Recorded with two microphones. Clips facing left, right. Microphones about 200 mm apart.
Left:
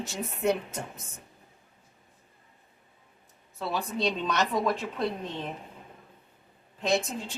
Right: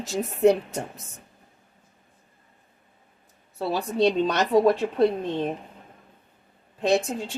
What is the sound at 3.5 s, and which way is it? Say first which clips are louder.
Speech: right 7 dB; 35° right (ahead or behind).